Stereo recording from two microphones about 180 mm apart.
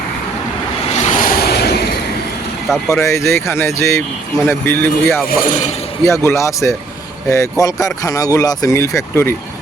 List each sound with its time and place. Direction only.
0.9 s vehicle: 45° left (ahead or behind); by 1.9 s 65° left (ahead or behind)
2.9 s speech: 15° left (ahead or behind)
5.3 s speech: 45° left (ahead or behind)
6.1 s speech: 15° left (ahead or behind)